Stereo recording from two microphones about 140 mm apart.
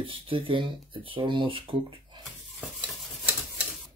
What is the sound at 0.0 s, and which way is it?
Speech, 40° right (ahead or behind).